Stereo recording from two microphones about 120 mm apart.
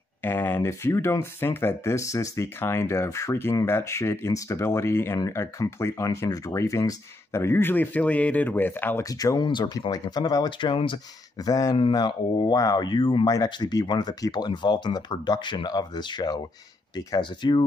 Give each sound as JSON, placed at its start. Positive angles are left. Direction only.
{"t": 0.2, "sound": "speech", "side_deg": 15}
{"t": 9.1, "sound": "speech", "side_deg": 30}
{"t": 11.3, "sound": "speech", "side_deg": 30}